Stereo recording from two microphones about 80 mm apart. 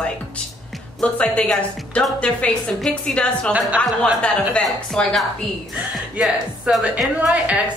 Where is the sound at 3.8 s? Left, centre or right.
Centre.